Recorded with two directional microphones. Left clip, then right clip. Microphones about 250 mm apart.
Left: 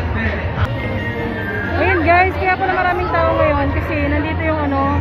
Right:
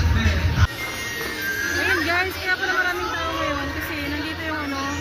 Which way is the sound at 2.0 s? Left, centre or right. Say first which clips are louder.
Left 9 dB; centre.